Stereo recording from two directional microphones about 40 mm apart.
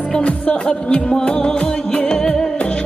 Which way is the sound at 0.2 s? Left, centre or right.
Left.